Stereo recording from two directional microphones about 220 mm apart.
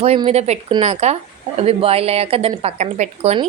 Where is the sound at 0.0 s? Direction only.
30° right (ahead or behind).